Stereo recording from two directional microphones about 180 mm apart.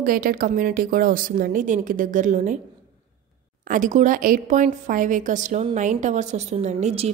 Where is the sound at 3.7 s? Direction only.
45° right (ahead or behind).